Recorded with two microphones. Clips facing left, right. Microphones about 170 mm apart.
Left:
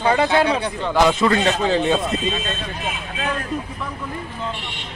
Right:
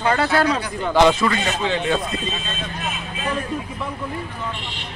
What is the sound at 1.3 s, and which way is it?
Speech, 35° left (ahead or behind).